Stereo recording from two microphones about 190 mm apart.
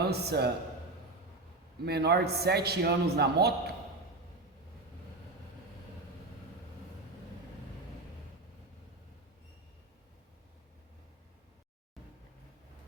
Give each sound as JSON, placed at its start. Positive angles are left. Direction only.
{"t": 0.1, "sound": "a man's voice", "side_deg": -60}
{"t": 1.8, "sound": "a man's voice", "side_deg": -60}